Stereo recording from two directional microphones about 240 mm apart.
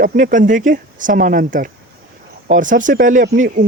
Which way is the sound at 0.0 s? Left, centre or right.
Right.